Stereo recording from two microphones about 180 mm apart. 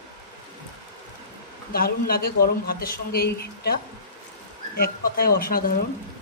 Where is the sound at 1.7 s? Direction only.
55° left (ahead or behind).